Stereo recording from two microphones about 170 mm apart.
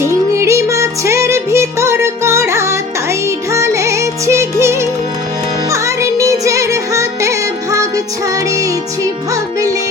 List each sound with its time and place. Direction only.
0.0 s music: 15° right (ahead or behind)